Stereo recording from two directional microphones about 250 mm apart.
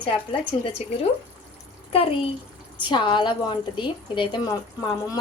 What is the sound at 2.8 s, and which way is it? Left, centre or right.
A woman's voice, centre.